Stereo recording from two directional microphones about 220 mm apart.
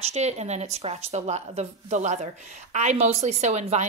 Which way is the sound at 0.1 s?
30° right (ahead or behind).